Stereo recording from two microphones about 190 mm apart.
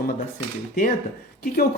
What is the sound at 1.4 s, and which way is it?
Speech, 50° left (ahead or behind).